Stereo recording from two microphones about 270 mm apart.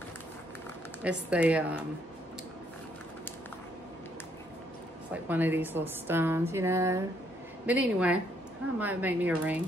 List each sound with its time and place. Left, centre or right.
1.0 s speech: centre
5.3 s a woman's voice: centre